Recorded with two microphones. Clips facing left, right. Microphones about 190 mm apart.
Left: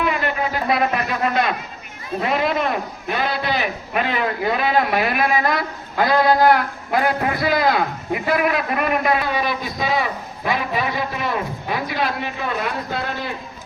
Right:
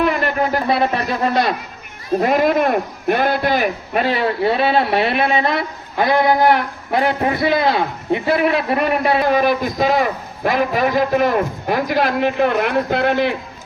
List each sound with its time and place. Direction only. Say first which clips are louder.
0.7 s speech: right 2 dB; 30° right (ahead or behind)
2.1 s a man's voice: right 6 dB; 45° right (ahead or behind)
3.9 s a man's voice: right 3 dB; 35° right (ahead or behind)
9.2 s a man's voice: right 7 dB; 50° right (ahead or behind); by 13.3 s 70° right (ahead or behind)